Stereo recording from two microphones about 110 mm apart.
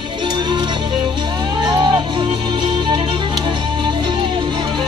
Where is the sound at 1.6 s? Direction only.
40° right (ahead or behind).